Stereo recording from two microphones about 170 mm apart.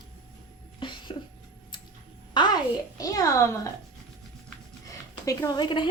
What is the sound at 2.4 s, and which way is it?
A woman's voice, 25° left (ahead or behind).